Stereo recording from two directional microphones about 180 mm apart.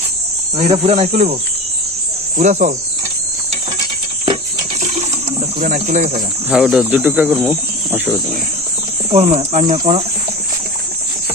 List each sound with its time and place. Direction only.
0.5 s speech: 35° right (ahead or behind)
2.4 s speech: 45° right (ahead or behind)
5.5 s speech: 45° right (ahead or behind)
6.5 s speech: 5° right (ahead or behind)
9.0 s speech: 35° right (ahead or behind)